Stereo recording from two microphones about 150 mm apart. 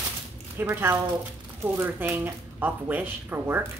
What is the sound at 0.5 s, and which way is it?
Speech, 15° right (ahead or behind).